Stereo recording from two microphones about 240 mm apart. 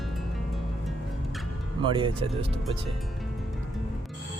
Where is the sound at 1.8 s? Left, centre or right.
Right.